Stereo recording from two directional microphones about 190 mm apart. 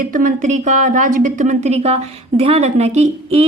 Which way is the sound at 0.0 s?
45° right (ahead or behind).